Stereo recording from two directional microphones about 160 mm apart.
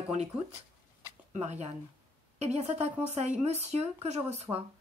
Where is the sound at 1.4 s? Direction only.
45° right (ahead or behind).